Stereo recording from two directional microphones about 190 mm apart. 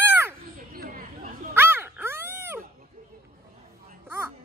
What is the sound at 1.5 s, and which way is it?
Dog, 10° right (ahead or behind).